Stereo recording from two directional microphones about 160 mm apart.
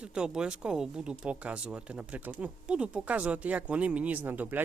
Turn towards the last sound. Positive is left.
turn(degrees=-10)  # may be behind; listen again after turning